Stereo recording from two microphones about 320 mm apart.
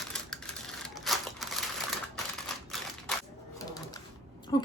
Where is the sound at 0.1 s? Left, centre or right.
Centre.